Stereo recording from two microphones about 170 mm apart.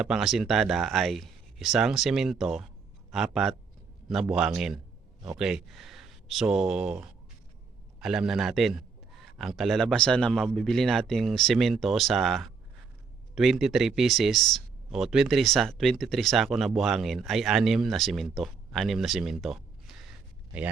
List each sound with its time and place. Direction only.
0.0 s speech: centre (ahead or behind)